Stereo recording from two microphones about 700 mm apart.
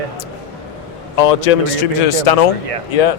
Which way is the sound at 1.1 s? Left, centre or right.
Left.